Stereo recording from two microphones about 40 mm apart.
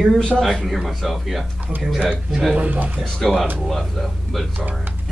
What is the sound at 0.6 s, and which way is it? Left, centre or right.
Speech, centre.